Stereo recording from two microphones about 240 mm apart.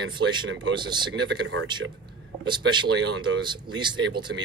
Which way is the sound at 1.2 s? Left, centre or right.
Right.